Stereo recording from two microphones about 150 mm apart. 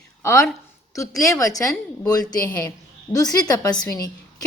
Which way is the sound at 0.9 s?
20° left (ahead or behind).